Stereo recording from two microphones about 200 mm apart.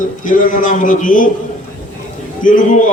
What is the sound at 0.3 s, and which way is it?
A man's voice, 40° left (ahead or behind).